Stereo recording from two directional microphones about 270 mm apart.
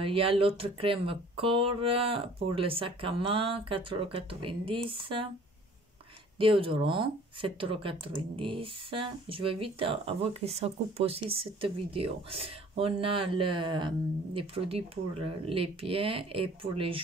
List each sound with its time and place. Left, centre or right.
0.0 s speech: centre
6.3 s speech: centre